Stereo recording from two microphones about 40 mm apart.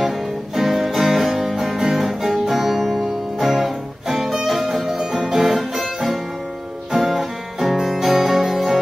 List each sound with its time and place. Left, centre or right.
0.6 s music: centre
5.4 s music: centre